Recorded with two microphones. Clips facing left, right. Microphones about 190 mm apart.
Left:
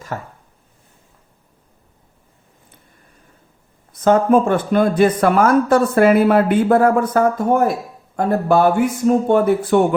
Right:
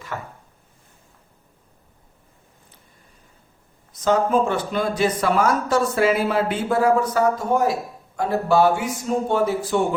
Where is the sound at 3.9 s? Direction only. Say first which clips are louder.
Left 5 dB; 55° left (ahead or behind).